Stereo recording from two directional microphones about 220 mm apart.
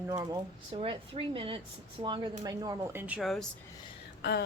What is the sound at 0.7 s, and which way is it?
Speech, 25° right (ahead or behind).